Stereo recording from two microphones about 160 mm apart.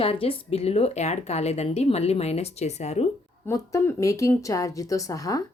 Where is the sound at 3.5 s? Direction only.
20° left (ahead or behind).